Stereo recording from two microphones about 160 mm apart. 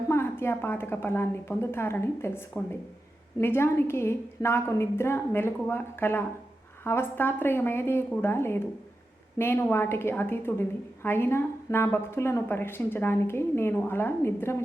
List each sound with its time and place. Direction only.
0.1 s a woman's voice: 15° left (ahead or behind)